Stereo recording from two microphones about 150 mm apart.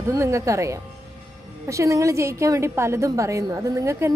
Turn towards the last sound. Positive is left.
turn(degrees=-20)  # may be behind; listen again after turning